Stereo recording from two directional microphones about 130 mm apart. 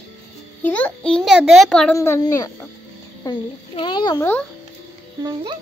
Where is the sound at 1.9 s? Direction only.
20° left (ahead or behind).